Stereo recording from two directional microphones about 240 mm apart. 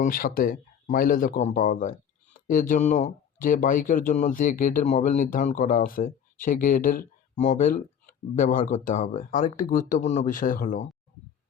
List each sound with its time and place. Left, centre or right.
0.0 s speech: left